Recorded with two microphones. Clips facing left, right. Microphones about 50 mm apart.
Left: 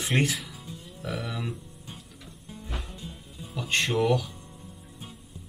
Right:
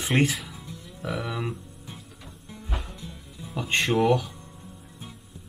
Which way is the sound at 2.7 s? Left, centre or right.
Centre.